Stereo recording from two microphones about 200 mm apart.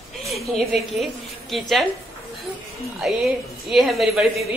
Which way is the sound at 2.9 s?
Centre (ahead or behind).